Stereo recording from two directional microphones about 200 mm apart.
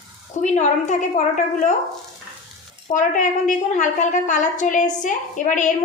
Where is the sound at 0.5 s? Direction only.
35° left (ahead or behind).